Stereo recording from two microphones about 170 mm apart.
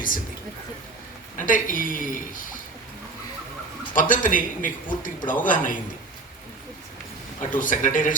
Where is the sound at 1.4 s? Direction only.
55° left (ahead or behind).